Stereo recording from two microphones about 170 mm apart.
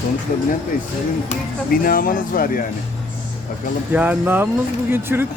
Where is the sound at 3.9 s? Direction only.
10° right (ahead or behind).